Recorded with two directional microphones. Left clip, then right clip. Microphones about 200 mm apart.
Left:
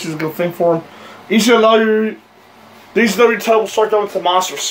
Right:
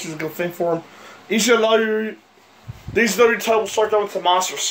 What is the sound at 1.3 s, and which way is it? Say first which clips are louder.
Speech: left 5 dB; 20° right (ahead or behind).